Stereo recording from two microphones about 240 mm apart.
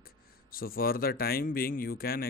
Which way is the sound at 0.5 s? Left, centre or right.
Left.